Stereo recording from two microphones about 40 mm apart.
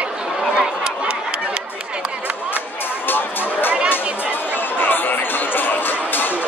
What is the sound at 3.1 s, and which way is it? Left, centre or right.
Music, left.